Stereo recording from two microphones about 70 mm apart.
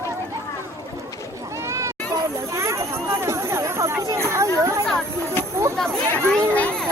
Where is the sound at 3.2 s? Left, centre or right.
Right.